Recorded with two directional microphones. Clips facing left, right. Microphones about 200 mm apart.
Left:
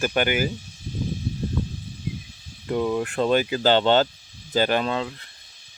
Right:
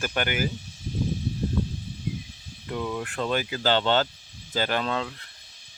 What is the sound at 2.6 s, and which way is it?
Speech, 30° left (ahead or behind).